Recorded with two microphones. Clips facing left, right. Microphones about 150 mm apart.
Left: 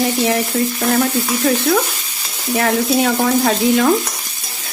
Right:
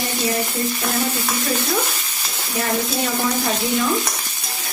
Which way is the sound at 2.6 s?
90° left.